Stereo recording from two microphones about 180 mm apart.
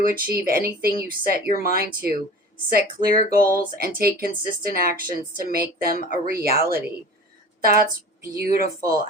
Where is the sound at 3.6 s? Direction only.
55° right (ahead or behind).